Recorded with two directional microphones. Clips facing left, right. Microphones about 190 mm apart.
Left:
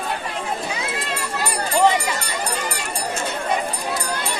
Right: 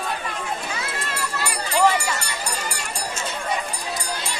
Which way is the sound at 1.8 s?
15° left (ahead or behind).